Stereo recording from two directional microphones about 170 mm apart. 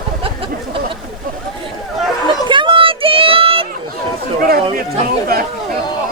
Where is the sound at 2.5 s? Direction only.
30° right (ahead or behind).